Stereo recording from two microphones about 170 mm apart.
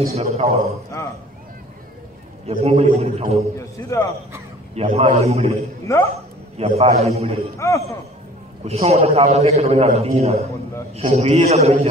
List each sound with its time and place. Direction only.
0.1 s a man's voice: 40° right (ahead or behind)
2.6 s a man's voice: 40° right (ahead or behind)
3.5 s a man's voice: 15° left (ahead or behind)
4.7 s a man's voice: 35° right (ahead or behind)
5.9 s a man's voice: 15° left (ahead or behind)
6.5 s a man's voice: 35° right (ahead or behind)
7.5 s a man's voice: 15° left (ahead or behind)
8.6 s a man's voice: 35° right (ahead or behind)